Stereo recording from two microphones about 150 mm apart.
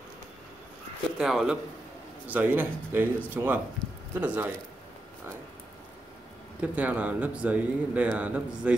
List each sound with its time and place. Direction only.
1.1 s a man's voice: 5° right (ahead or behind)
6.6 s speech: 10° right (ahead or behind)